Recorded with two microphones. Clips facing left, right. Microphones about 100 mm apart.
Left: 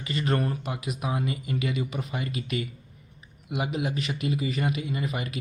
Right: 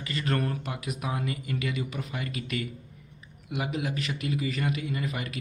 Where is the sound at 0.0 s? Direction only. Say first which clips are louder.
Left 2 dB; 25° left (ahead or behind).